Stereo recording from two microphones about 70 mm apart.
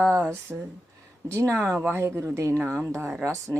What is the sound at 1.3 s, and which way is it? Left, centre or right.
A woman's voice, right.